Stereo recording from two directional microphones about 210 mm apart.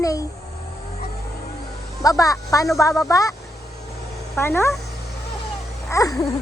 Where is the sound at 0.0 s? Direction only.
15° left (ahead or behind).